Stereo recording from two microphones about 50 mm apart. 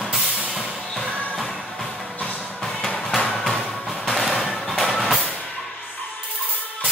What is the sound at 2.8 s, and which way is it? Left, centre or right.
Music, centre.